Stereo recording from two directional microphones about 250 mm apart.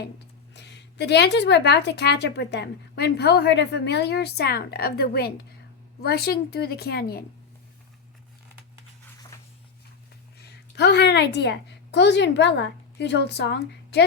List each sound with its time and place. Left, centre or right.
0.5 s a woman's voice: left
10.3 s a woman's voice: left